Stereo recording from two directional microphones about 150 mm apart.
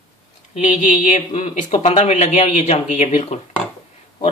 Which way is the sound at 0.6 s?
55° left (ahead or behind).